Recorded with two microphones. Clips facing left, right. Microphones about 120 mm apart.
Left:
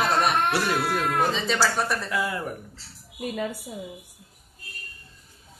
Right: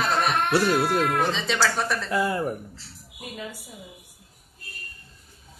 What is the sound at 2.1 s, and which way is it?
Speech, 30° right (ahead or behind).